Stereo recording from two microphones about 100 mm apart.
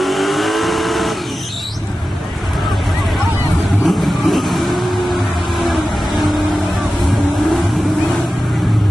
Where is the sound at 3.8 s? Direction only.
Centre (ahead or behind).